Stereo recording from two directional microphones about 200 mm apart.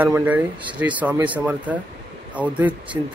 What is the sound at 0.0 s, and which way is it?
Speech, 10° right (ahead or behind).